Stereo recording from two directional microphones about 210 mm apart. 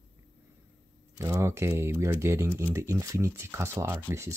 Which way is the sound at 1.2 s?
15° right (ahead or behind).